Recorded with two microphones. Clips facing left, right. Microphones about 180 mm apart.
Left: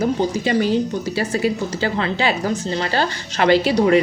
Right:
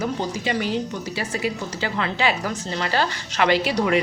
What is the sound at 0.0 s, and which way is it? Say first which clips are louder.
A woman's voice: left 6 dB; 35° left (ahead or behind).